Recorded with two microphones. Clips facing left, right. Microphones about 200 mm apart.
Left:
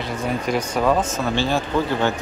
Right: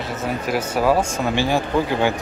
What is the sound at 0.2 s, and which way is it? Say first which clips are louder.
Speech: even; 5° right (ahead or behind).